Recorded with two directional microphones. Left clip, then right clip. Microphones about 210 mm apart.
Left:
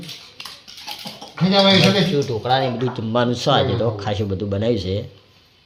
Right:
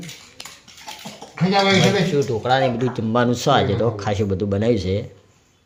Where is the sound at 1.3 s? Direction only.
40° right (ahead or behind).